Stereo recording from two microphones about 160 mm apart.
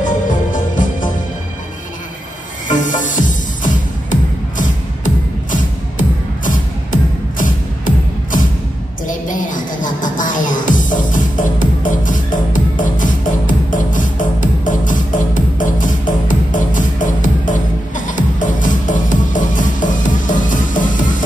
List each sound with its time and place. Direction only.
0.0 s music: 55° left (ahead or behind)
2.7 s music: 55° left (ahead or behind)